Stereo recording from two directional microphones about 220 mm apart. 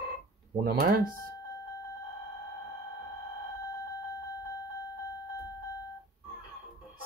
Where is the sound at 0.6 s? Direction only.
40° right (ahead or behind).